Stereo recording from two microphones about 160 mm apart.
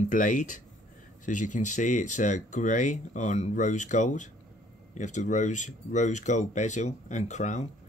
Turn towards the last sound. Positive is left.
turn(degrees=45)  # may be behind; listen again after turning